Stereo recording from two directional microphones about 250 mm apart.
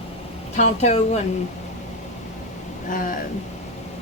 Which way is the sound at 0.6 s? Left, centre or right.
Left.